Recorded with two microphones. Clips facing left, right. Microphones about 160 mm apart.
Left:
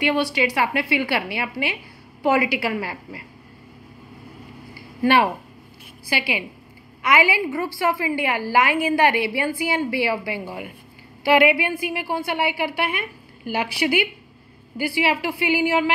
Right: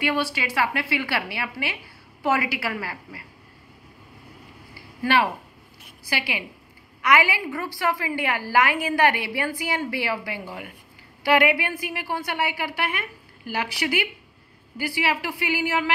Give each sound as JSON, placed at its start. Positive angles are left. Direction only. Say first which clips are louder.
{"t": 0.4, "sound": "a woman's voice", "louder": "left 4 dB", "side_deg": 20}
{"t": 5.0, "sound": "a woman's voice", "louder": "left 4 dB", "side_deg": 25}
{"t": 6.0, "sound": "a woman's voice", "louder": "left 4 dB", "side_deg": 15}